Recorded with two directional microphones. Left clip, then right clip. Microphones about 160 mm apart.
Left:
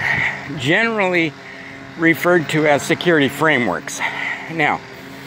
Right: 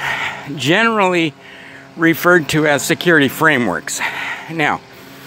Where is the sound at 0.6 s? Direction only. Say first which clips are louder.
Right 3 dB; 60° right (ahead or behind).